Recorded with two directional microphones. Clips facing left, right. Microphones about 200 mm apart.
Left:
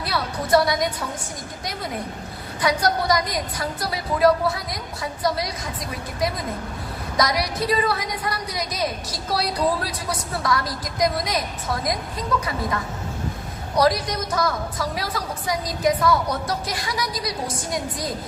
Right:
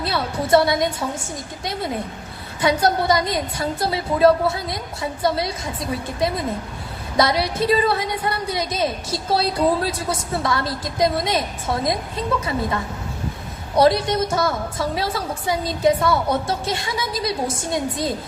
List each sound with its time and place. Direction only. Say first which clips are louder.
0.0 s a woman's voice: right 3 dB; 25° right (ahead or behind)
2.6 s a woman's voice: right 3 dB; 25° right (ahead or behind)